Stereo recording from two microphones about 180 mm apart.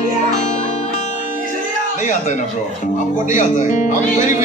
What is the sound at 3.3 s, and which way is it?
Speech, 45° left (ahead or behind).